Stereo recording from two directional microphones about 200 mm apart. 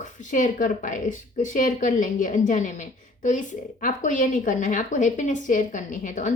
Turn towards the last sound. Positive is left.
turn(degrees=40)  # may be behind; listen again after turning